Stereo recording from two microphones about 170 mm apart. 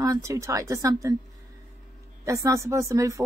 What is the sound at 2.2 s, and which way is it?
A woman's voice, 20° right (ahead or behind).